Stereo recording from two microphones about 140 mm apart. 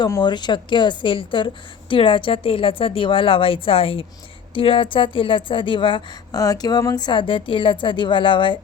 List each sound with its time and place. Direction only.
0.2 s speech: 30° left (ahead or behind)
6.4 s speech: 25° left (ahead or behind)